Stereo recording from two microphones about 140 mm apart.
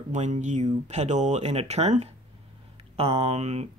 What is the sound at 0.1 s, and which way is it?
Speech, 60° right (ahead or behind).